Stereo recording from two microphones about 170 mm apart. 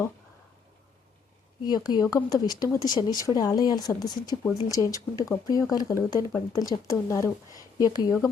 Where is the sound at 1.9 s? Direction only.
20° left (ahead or behind).